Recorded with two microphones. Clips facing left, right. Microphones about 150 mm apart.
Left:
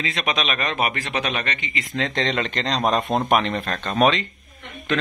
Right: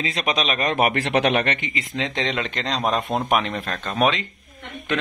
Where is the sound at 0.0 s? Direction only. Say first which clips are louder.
Right 1 dB; 30° right (ahead or behind); by 1.7 s 55° right (ahead or behind).